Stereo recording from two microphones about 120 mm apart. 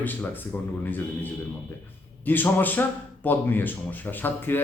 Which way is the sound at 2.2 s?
15° left (ahead or behind).